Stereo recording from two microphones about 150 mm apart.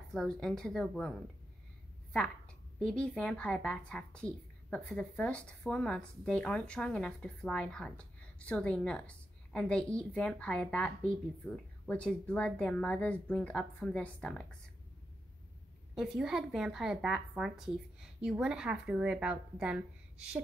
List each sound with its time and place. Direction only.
0.1 s a woman's voice: 5° left (ahead or behind)
2.1 s a woman's voice: 5° left (ahead or behind)
15.9 s a woman's voice: 5° right (ahead or behind)